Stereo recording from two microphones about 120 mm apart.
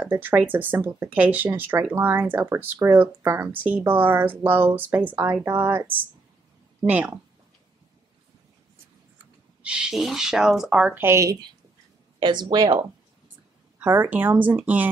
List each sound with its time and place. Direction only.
0.0 s speech: 15° right (ahead or behind)
6.9 s speech: 10° right (ahead or behind)
9.2 s speech: 10° right (ahead or behind)
11.1 s a woman's voice: 25° right (ahead or behind)
12.2 s speech: 40° right (ahead or behind)
13.7 s speech: 15° right (ahead or behind)